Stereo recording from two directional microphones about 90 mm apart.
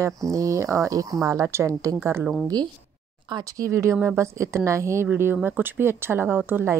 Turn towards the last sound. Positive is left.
turn(degrees=-25)  # may be behind; listen again after turning